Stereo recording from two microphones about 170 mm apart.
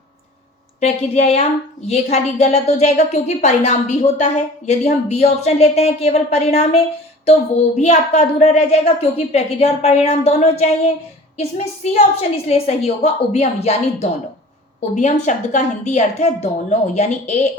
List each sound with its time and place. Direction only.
0.8 s a woman's voice: 40° left (ahead or behind)